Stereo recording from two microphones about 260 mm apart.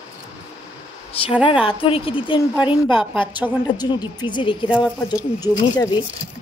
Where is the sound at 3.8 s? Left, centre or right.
Centre.